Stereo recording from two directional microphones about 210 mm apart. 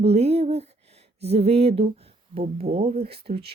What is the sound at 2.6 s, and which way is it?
Speech, 45° right (ahead or behind).